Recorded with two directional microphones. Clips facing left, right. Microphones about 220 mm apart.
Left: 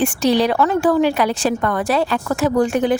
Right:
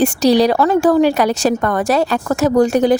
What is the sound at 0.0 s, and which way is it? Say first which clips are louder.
A woman's voice: right 4 dB; 40° right (ahead or behind).